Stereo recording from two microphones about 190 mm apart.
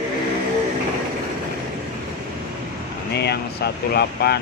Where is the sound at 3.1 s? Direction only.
60° left (ahead or behind).